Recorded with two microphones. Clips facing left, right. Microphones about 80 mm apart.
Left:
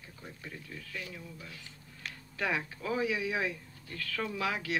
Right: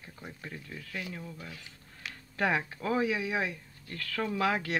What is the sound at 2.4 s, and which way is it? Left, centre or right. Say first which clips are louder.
Speech: right 4 dB; right.